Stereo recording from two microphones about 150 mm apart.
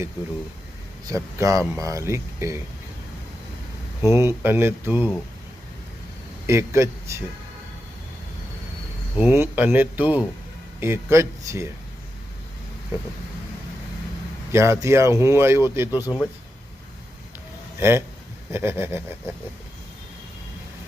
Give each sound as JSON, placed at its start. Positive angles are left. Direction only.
{"t": 1.0, "sound": "speech", "side_deg": -20}
{"t": 4.0, "sound": "speech", "side_deg": -20}
{"t": 6.5, "sound": "speech", "side_deg": -20}
{"t": 9.1, "sound": "speech", "side_deg": -15}
{"t": 14.5, "sound": "speech", "side_deg": -20}
{"t": 17.7, "sound": "speech", "side_deg": -15}